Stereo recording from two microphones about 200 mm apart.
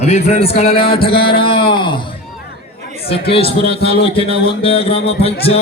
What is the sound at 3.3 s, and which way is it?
A man's voice, 30° left (ahead or behind).